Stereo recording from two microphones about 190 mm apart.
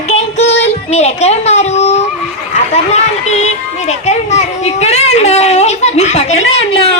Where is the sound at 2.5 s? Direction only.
35° left (ahead or behind).